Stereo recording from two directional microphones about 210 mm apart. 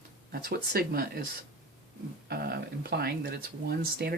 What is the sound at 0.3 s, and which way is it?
Speech, 45° right (ahead or behind).